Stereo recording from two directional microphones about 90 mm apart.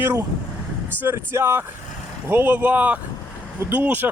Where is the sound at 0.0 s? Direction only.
25° right (ahead or behind).